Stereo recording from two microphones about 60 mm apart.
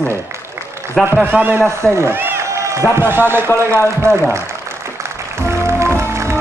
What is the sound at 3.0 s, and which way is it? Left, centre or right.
Speech, right.